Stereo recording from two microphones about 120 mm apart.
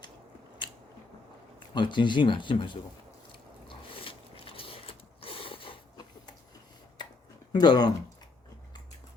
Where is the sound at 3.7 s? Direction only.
50° left (ahead or behind).